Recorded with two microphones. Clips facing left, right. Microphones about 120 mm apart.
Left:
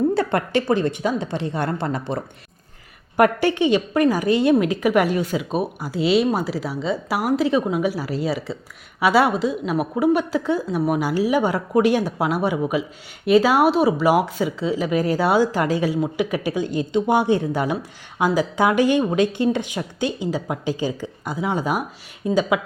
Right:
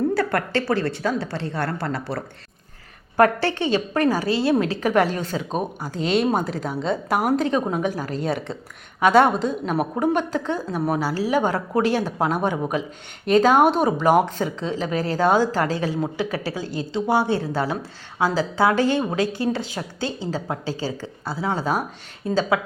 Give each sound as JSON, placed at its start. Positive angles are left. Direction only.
{"t": 0.1, "sound": "speech", "side_deg": 20}